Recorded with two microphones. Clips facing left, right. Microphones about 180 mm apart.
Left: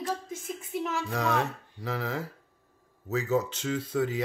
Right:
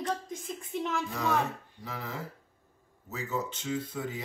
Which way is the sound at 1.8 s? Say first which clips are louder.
Left 7 dB; 90° left.